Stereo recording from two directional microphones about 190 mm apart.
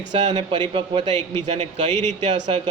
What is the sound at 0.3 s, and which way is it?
A man's voice, 30° right (ahead or behind).